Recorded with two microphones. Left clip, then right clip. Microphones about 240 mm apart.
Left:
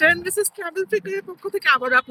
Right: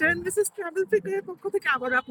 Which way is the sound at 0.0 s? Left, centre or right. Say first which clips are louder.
Left 6 dB; centre.